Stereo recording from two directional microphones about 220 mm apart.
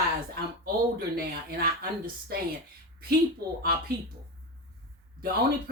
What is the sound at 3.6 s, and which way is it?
Speech, 45° right (ahead or behind).